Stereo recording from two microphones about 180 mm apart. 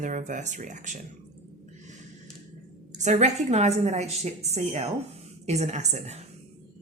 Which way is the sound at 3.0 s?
40° right (ahead or behind).